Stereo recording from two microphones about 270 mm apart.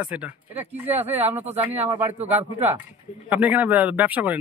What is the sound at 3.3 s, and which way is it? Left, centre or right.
Speech, centre.